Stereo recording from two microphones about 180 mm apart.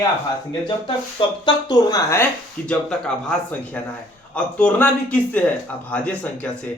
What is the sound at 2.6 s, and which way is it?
A man's voice, 5° left (ahead or behind).